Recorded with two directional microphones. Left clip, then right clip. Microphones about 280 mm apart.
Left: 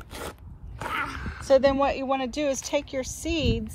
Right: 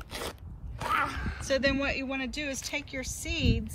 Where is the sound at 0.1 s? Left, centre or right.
Centre.